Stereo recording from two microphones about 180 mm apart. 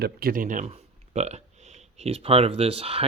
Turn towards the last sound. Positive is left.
turn(degrees=-30)  # may be behind; listen again after turning